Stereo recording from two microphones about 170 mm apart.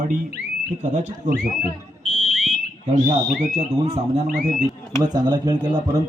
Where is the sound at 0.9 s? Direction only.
45° right (ahead or behind).